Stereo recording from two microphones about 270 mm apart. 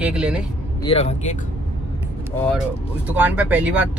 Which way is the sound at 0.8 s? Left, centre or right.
Left.